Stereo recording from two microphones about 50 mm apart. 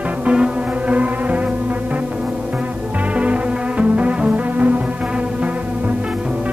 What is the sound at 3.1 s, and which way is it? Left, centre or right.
Music, right.